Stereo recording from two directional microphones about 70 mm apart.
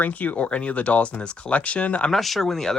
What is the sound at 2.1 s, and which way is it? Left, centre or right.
Speech, centre.